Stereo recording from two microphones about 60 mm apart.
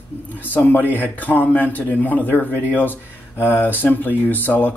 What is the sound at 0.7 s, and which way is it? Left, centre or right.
Speech, left.